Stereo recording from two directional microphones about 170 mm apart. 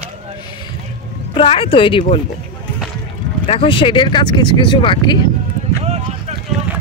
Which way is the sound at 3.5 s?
30° left (ahead or behind).